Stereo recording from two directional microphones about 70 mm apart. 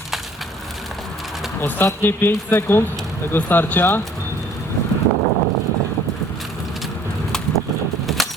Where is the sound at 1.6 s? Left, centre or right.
Left.